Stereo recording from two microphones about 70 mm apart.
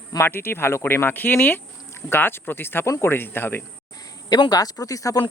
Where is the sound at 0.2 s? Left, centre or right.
Left.